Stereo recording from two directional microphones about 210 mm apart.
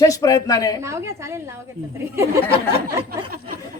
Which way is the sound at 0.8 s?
15° right (ahead or behind).